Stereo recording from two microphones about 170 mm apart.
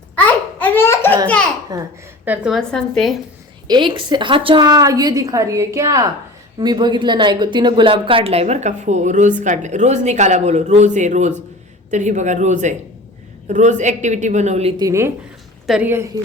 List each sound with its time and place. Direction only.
0.6 s laughter: 10° left (ahead or behind)
1.7 s a woman's voice: 20° right (ahead or behind)
2.2 s a woman's voice: 5° right (ahead or behind)
3.7 s a woman's voice: 30° right (ahead or behind)
14.8 s a woman's voice: 15° right (ahead or behind)
15.6 s speech: 5° right (ahead or behind)